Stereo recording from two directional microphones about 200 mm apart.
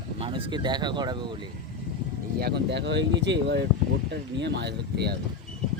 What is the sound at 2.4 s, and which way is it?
Speech, 55° right (ahead or behind).